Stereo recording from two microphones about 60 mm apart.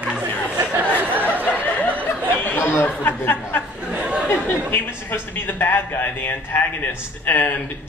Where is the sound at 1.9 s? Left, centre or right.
Right.